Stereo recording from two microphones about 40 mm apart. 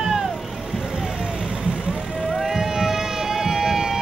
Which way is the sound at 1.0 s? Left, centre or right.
Centre.